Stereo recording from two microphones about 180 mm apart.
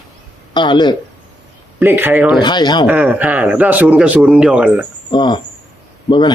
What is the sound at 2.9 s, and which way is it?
Speech, 10° right (ahead or behind).